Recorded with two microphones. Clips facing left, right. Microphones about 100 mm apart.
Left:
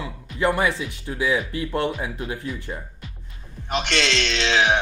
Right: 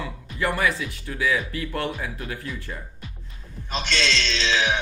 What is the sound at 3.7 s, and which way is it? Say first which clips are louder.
Speech: left 3 dB; 65° left (ahead or behind).